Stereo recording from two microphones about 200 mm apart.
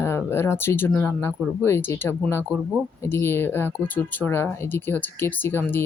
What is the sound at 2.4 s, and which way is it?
Speech, 10° right (ahead or behind).